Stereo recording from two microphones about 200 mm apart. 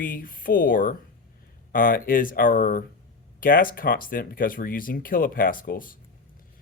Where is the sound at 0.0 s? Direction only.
45° left (ahead or behind).